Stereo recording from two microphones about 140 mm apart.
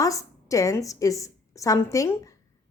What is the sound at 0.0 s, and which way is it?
A woman's voice, 25° left (ahead or behind).